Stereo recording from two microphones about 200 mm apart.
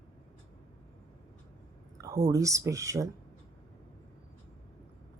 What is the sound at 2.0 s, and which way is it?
Speech, 15° right (ahead or behind).